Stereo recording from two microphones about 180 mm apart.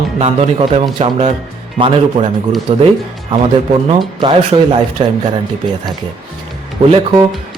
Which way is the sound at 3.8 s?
30° right (ahead or behind).